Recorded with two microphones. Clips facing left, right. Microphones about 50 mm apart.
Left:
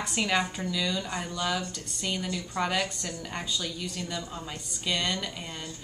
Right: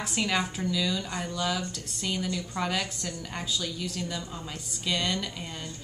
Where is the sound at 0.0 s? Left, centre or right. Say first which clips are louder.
Left 1 dB; centre.